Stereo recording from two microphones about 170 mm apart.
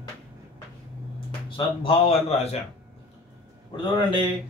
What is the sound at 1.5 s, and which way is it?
Speech, 30° left (ahead or behind).